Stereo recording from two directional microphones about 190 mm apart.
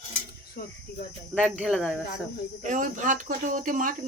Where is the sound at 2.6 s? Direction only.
40° right (ahead or behind).